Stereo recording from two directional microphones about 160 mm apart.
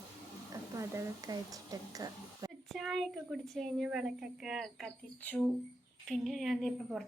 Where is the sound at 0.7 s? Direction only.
20° right (ahead or behind).